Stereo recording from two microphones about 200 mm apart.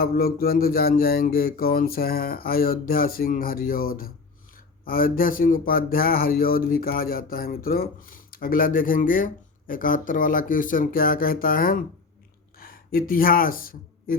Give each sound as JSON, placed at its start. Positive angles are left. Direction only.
{"t": 0.0, "sound": "speech", "side_deg": 50}